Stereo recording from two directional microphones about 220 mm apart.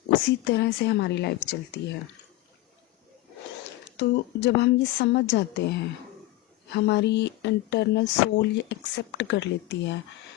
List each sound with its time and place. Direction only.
0.4 s speech: 50° left (ahead or behind)
3.9 s speech: 50° left (ahead or behind)
6.7 s speech: 50° left (ahead or behind)